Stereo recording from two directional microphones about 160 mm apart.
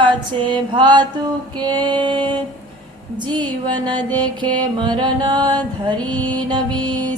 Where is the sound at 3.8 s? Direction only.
30° right (ahead or behind).